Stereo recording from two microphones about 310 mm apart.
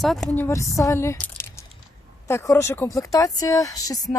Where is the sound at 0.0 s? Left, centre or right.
Centre.